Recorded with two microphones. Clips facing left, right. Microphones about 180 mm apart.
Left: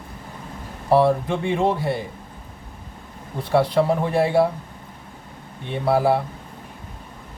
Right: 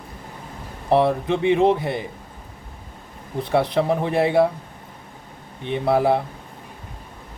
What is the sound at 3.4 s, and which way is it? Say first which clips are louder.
Speech: left 1 dB; 20° right (ahead or behind).